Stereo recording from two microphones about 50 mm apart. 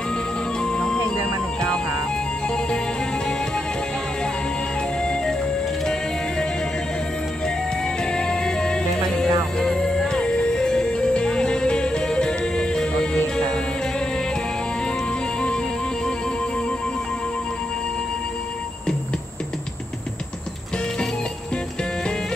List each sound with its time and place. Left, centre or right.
0.6 s music: centre
5.0 s music: centre
8.0 s music: centre